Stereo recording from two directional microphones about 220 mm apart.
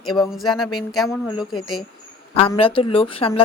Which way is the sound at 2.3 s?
25° left (ahead or behind).